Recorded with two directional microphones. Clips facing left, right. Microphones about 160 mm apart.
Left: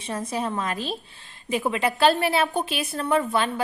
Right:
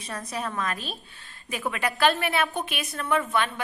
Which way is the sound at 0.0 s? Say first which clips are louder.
Left 5 dB; 25° left (ahead or behind).